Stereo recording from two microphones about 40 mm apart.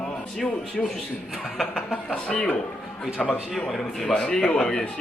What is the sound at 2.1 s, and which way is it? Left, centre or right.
A man's voice, left.